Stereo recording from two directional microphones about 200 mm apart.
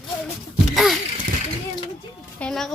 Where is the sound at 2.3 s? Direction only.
5° left (ahead or behind).